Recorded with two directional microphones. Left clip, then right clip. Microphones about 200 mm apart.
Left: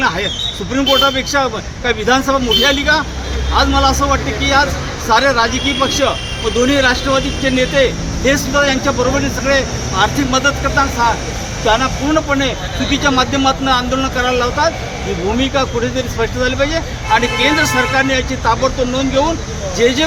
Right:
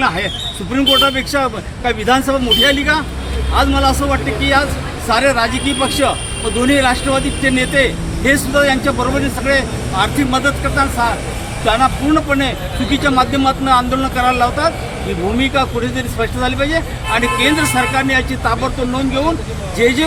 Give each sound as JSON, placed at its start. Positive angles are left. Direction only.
{"t": 0.7, "sound": "speech", "side_deg": -10}
{"t": 16.4, "sound": "speech", "side_deg": -15}